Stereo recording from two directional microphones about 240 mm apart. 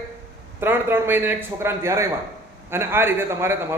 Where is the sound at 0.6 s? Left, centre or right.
Centre.